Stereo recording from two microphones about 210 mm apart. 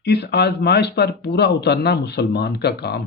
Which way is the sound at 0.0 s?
50° left (ahead or behind).